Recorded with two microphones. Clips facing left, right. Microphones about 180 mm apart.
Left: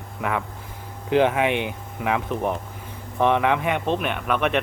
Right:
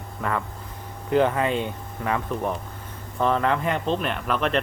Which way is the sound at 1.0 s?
90° left.